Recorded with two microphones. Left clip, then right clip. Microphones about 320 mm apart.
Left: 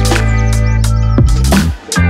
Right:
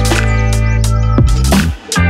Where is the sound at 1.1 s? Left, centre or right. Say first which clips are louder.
Even; centre.